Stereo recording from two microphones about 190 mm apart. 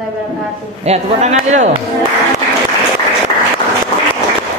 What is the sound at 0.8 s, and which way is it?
Speech, 35° right (ahead or behind).